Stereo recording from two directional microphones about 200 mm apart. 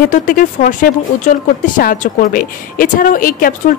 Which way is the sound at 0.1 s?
40° left (ahead or behind).